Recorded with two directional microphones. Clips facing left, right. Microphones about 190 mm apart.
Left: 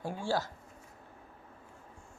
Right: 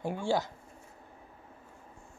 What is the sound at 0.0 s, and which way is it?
Speech, 20° right (ahead or behind).